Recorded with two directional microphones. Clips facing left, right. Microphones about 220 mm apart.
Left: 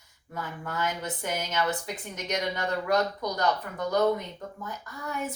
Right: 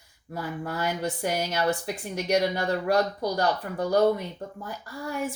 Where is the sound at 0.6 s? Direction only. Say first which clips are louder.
Right 2 dB; 35° right (ahead or behind).